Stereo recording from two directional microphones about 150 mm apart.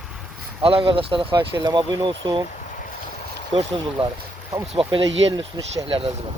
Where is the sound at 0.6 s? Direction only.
40° right (ahead or behind).